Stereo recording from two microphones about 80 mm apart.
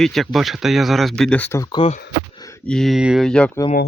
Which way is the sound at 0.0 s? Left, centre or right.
Centre.